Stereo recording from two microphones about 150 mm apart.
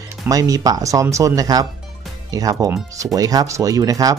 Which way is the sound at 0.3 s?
25° right (ahead or behind).